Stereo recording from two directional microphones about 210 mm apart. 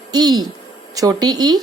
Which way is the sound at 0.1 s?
20° right (ahead or behind).